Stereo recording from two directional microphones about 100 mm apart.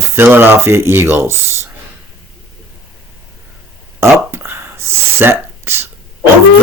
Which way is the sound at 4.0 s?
25° right (ahead or behind).